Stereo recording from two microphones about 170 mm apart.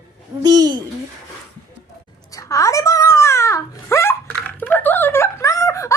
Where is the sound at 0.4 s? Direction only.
20° right (ahead or behind).